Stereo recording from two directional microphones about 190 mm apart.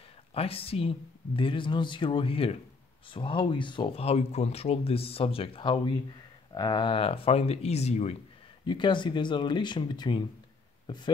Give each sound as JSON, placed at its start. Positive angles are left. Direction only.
{"t": 0.3, "sound": "speech", "side_deg": 30}
{"t": 8.6, "sound": "speech", "side_deg": 25}